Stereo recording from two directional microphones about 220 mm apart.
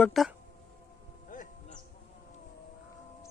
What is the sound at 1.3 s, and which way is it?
Music, 35° left (ahead or behind).